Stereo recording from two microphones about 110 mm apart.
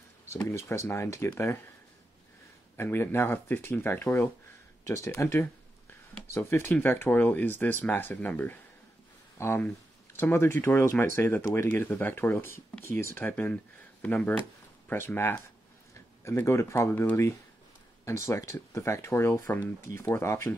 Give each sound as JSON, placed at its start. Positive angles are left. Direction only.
{"t": 0.5, "sound": "speech", "side_deg": 25}
{"t": 2.8, "sound": "speech", "side_deg": 20}
{"t": 18.0, "sound": "speech", "side_deg": 25}